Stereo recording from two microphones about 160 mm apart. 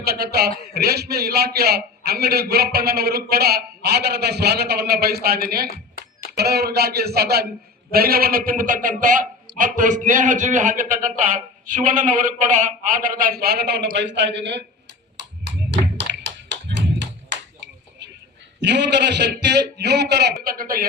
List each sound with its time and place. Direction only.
0.0 s a man's voice: 75° right (ahead or behind)
7.9 s a man's voice: 70° right (ahead or behind); by 14.6 s 90° right
16.0 s tap: 90° right
18.6 s a man's voice: 90° right
20.4 s a man's voice: 65° right (ahead or behind)